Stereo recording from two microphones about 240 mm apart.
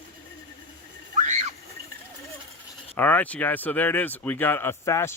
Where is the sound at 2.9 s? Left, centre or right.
Centre.